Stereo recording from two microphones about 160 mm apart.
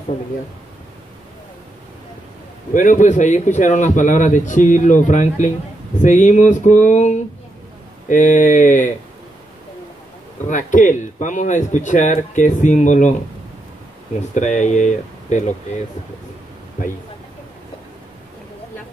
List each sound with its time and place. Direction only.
2.7 s a man's voice: 55° left (ahead or behind)
10.5 s a man's voice: 55° left (ahead or behind)
14.3 s a man's voice: 50° left (ahead or behind)